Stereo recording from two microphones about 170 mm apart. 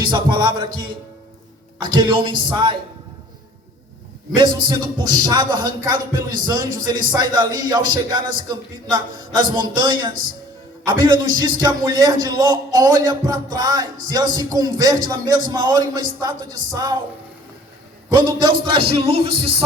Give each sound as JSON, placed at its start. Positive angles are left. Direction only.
{"t": 0.0, "sound": "a man's voice", "side_deg": -25}
{"t": 1.8, "sound": "a man's voice", "side_deg": -25}
{"t": 4.4, "sound": "a man's voice", "side_deg": -25}
{"t": 18.2, "sound": "a man's voice", "side_deg": -30}